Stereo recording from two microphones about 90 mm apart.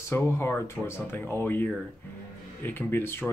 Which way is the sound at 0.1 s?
30° left (ahead or behind).